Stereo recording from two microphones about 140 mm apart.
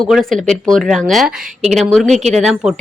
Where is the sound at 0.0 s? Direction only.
Centre (ahead or behind).